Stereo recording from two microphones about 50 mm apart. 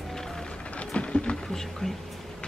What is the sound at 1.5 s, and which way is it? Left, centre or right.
Music, centre.